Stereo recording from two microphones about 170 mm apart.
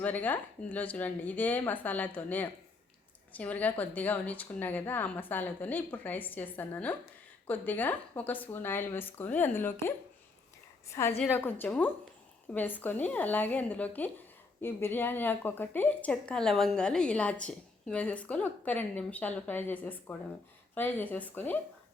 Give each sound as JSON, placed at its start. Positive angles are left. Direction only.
{"t": 0.0, "sound": "a woman's voice", "side_deg": 10}